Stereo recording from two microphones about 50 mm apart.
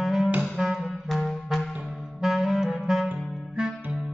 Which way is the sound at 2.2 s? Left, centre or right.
Centre.